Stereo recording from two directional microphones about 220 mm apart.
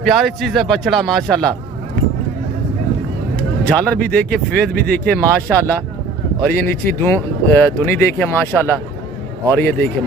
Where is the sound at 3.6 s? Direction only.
5° left (ahead or behind).